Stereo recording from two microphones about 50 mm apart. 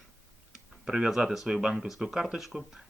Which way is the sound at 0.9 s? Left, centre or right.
Centre.